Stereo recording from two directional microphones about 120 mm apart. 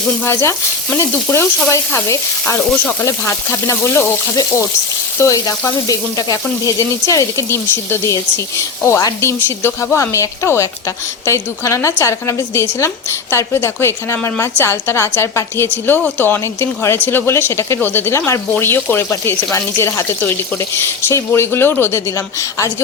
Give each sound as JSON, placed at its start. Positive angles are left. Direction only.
{"t": 0.3, "sound": "frying", "side_deg": 25}
{"t": 5.2, "sound": "frying", "side_deg": 25}